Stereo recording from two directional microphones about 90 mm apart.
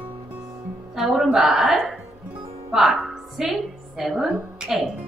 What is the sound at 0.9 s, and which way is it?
A woman's voice, 5° right (ahead or behind).